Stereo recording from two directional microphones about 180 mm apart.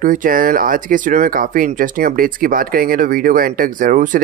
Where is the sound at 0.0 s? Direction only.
50° right (ahead or behind).